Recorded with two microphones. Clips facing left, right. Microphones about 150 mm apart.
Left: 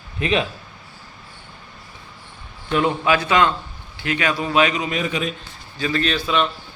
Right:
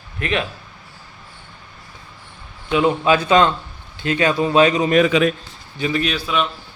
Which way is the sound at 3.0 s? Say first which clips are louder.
Right 4 dB; 25° right (ahead or behind).